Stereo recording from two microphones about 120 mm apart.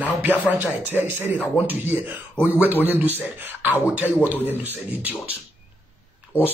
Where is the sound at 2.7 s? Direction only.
15° right (ahead or behind).